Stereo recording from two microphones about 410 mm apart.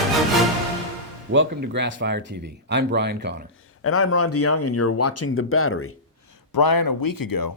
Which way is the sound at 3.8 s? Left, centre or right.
Left.